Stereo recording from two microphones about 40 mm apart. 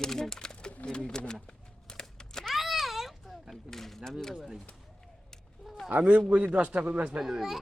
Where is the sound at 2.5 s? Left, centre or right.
Centre.